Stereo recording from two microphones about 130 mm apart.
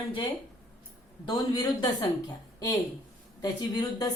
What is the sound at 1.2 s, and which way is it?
Speech, 35° left (ahead or behind).